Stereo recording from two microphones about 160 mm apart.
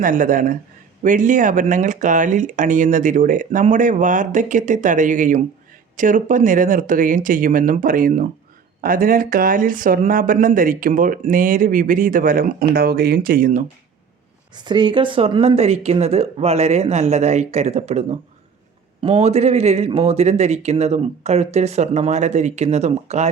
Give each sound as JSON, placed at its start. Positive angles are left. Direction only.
{"t": 0.0, "sound": "speech", "side_deg": -55}
{"t": 12.7, "sound": "speech", "side_deg": -75}
{"t": 14.5, "sound": "speech", "side_deg": -30}